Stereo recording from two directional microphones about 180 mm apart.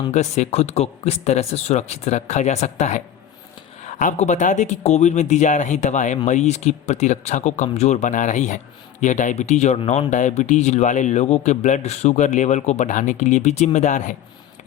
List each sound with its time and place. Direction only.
0.1 s speech: 40° left (ahead or behind)